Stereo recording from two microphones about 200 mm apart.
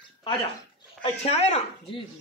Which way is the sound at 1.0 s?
30° left (ahead or behind).